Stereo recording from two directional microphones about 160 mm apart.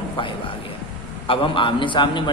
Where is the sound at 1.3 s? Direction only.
30° left (ahead or behind).